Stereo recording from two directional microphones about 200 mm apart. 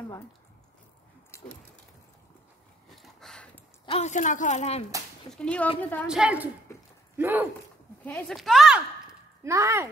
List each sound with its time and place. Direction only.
1.3 s a sound: 10° left (ahead or behind)
3.0 s a sound: centre (ahead or behind)
3.8 s a woman's voice: 30° left (ahead or behind)
5.4 s a woman's voice: 5° left (ahead or behind)
6.0 s a woman's voice: 5° right (ahead or behind)
8.0 s a woman's voice: 5° left (ahead or behind)
9.4 s speech: 15° right (ahead or behind)